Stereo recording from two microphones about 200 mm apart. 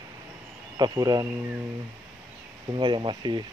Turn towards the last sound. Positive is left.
turn(degrees=-20)  # may be behind; listen again after turning